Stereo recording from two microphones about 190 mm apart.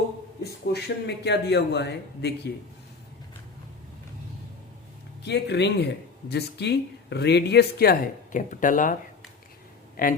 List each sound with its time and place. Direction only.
0.4 s speech: 60° left (ahead or behind)
5.2 s speech: 65° left (ahead or behind); by 9.0 s 45° left (ahead or behind)
10.0 s speech: 50° left (ahead or behind)